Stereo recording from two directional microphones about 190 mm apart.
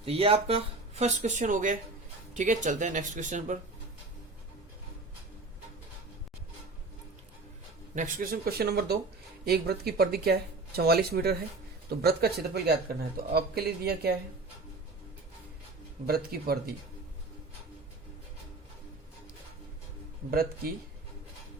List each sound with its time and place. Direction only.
0.0 s speech: 30° right (ahead or behind)
7.9 s speech: 45° right (ahead or behind)
16.0 s speech: 55° right (ahead or behind)